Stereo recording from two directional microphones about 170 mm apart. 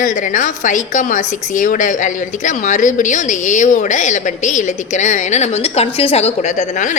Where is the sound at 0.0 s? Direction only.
50° left (ahead or behind).